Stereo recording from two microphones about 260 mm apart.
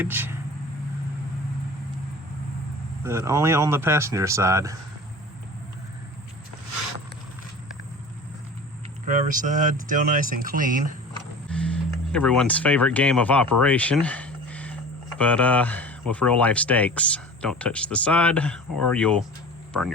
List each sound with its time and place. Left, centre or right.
0.0 s speech: centre
3.0 s speech: centre
9.0 s speech: right
11.4 s speech: centre